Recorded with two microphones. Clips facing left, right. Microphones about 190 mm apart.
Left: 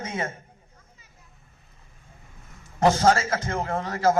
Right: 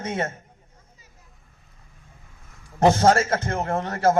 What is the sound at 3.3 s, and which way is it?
Speech, 60° right (ahead or behind).